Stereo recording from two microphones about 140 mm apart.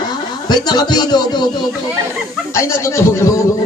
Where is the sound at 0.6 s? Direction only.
30° left (ahead or behind).